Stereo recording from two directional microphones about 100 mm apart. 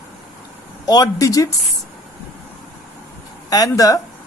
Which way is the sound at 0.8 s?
40° left (ahead or behind).